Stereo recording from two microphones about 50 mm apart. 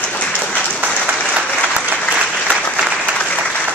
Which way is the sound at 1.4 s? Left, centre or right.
Left.